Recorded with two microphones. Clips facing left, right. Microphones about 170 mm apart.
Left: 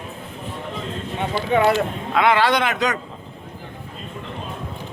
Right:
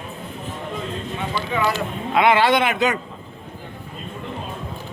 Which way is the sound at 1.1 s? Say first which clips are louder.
Left 6 dB; 55° left (ahead or behind).